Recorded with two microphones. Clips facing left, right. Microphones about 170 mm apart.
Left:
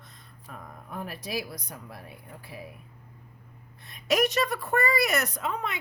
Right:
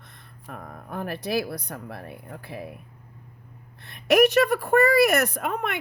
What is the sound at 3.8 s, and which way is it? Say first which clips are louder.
Speech: right 7 dB; 65° right (ahead or behind).